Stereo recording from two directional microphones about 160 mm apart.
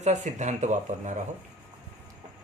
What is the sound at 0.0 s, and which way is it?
Speech, 50° right (ahead or behind).